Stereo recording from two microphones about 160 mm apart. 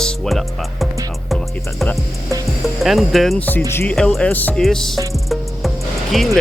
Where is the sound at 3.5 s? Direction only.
15° left (ahead or behind).